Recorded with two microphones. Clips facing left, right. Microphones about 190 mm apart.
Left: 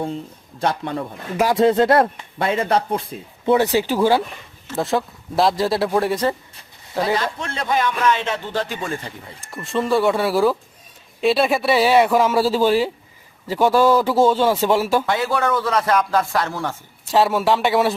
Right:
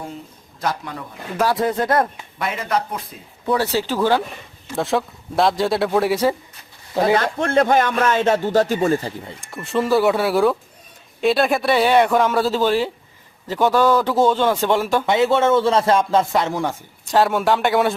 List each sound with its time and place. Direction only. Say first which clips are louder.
0.6 s speech: left 3 dB; 30° left (ahead or behind); by 4.2 s 15° left (ahead or behind)
4.8 s speech: even; centre (ahead or behind)
7.0 s a man's voice: right 4 dB; 55° right (ahead or behind); by 9.4 s 30° right (ahead or behind)
9.4 s speech: right 1 dB; centre (ahead or behind)
15.0 s speech: right 4 dB; 20° right (ahead or behind)
17.1 s speech: even; centre (ahead or behind)